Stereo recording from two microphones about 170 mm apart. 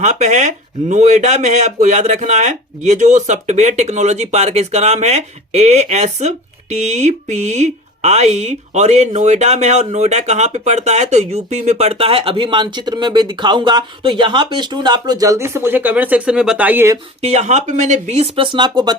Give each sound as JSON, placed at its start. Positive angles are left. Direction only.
{"t": 0.0, "sound": "speech", "side_deg": -45}
{"t": 17.2, "sound": "speech", "side_deg": -40}